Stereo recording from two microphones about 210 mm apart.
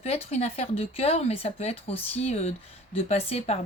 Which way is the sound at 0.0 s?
30° left (ahead or behind).